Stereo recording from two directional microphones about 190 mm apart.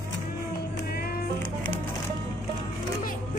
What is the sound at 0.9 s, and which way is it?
Music, 55° left (ahead or behind).